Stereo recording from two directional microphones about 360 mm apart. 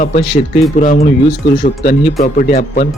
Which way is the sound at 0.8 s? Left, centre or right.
Left.